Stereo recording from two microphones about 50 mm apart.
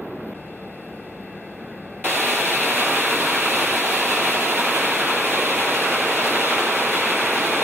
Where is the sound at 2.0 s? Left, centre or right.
Right.